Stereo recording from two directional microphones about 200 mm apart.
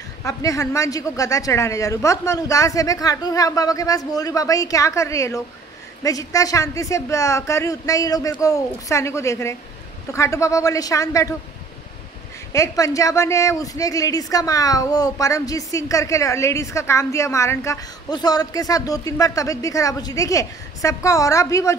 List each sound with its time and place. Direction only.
0.2 s a woman's voice: 15° left (ahead or behind)
12.5 s a woman's voice: 15° left (ahead or behind)